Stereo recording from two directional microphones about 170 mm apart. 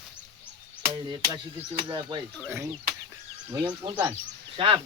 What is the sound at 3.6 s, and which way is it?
Speech, 25° right (ahead or behind).